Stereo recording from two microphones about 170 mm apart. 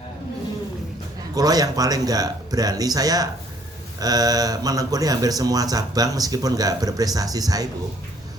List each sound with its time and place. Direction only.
1.4 s speech: 20° right (ahead or behind)